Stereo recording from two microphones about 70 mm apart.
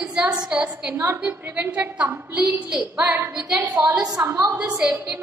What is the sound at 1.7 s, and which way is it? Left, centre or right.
A woman's voice, centre.